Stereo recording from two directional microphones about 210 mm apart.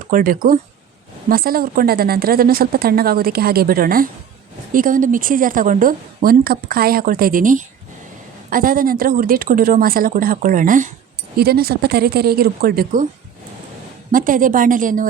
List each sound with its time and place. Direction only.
0.1 s a woman's voice: 40° right (ahead or behind)
14.1 s a woman's voice: 40° right (ahead or behind)